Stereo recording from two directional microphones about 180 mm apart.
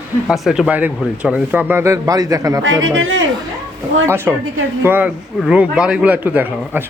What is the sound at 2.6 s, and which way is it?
Speech, 90° right.